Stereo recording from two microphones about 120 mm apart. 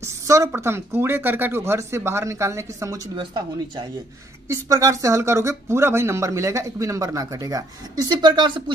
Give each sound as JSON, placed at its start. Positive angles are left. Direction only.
{"t": 0.0, "sound": "speech", "side_deg": -25}
{"t": 3.2, "sound": "speech", "side_deg": -40}
{"t": 4.5, "sound": "speech", "side_deg": -25}